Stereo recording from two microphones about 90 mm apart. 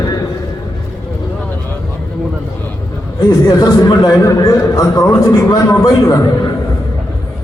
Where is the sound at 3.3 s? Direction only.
50° left (ahead or behind).